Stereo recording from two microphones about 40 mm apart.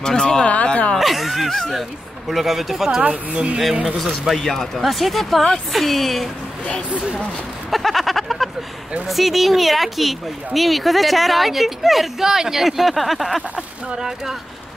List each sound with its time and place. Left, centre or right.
0.0 s speech: centre
0.4 s a sound: left
0.9 s a sound: centre
1.7 s speech: centre
3.0 s speech: right
4.3 s speech: centre
7.7 s a sound: centre
9.0 s speech: centre
13.9 s speech: centre